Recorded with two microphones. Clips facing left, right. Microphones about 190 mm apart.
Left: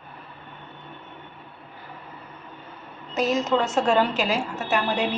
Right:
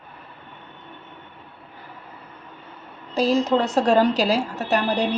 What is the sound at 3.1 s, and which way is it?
A woman's voice, 30° right (ahead or behind).